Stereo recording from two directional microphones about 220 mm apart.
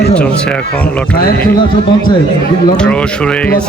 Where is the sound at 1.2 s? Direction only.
40° left (ahead or behind).